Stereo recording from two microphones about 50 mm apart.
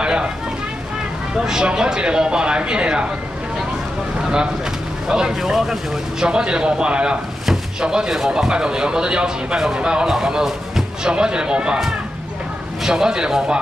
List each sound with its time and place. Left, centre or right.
0.0 s a sound: centre
1.3 s speech: centre
5.0 s speech: centre
6.2 s speech: centre
12.9 s speech: centre